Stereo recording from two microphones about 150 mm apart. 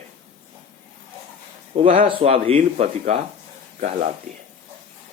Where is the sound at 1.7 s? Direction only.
40° right (ahead or behind).